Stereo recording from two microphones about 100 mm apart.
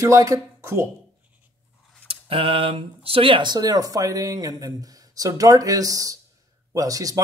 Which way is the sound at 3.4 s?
40° right (ahead or behind).